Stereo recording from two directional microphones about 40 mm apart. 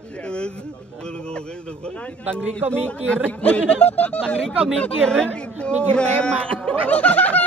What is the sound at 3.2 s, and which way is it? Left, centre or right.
Speech, left.